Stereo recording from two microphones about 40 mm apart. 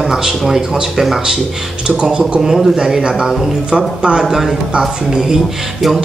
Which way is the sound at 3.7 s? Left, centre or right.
Right.